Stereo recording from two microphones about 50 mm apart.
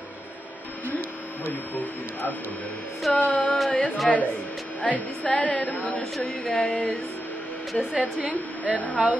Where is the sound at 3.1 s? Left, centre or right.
Left.